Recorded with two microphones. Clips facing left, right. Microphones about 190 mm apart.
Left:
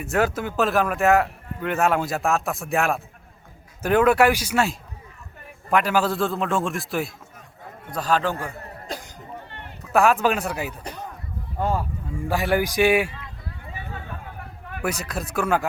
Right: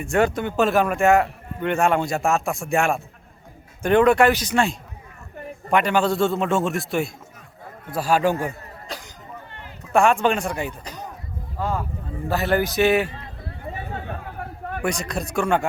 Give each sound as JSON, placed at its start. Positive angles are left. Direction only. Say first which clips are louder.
{"t": 0.0, "sound": "a man's voice", "louder": "right 2 dB", "side_deg": 5}
{"t": 9.9, "sound": "a man's voice", "louder": "right 1 dB", "side_deg": 5}
{"t": 12.3, "sound": "speech", "louder": "right 1 dB", "side_deg": 10}
{"t": 13.1, "sound": "run", "louder": "right 2 dB", "side_deg": -35}
{"t": 14.8, "sound": "a man's voice", "louder": "right 1 dB", "side_deg": 5}